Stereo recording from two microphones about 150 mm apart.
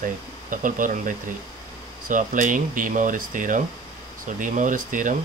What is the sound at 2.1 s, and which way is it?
Speech, 60° right (ahead or behind).